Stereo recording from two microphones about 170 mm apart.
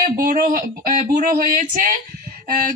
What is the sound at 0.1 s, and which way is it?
A woman's voice, 55° right (ahead or behind).